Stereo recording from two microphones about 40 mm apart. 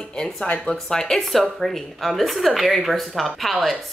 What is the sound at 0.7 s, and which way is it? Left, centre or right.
Speech, centre.